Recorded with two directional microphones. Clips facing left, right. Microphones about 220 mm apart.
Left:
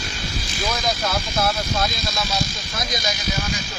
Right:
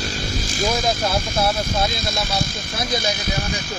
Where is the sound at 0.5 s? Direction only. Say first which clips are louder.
Right 4 dB; 50° right (ahead or behind).